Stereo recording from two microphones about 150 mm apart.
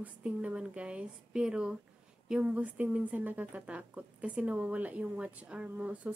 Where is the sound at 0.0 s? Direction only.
10° right (ahead or behind).